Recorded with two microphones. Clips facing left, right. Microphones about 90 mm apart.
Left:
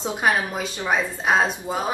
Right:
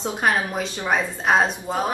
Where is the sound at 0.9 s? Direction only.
5° left (ahead or behind).